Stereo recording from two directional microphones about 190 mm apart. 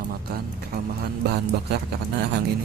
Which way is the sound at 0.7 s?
55° right (ahead or behind).